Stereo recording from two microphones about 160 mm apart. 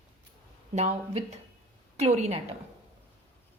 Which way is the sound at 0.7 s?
45° right (ahead or behind).